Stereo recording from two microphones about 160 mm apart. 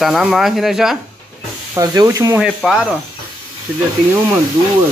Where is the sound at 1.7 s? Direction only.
20° right (ahead or behind).